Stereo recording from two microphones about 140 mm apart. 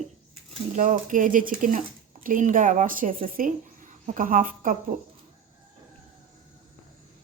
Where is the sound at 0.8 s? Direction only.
70° right (ahead or behind).